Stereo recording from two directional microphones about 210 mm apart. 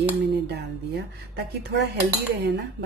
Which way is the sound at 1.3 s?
55° right (ahead or behind).